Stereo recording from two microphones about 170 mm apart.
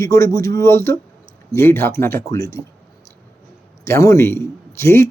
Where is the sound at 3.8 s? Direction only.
15° left (ahead or behind).